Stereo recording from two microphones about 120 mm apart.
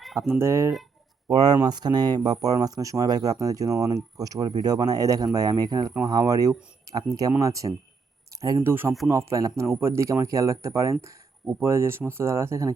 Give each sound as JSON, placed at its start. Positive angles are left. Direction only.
{"t": 0.2, "sound": "speech", "side_deg": -20}
{"t": 8.7, "sound": "speech", "side_deg": -20}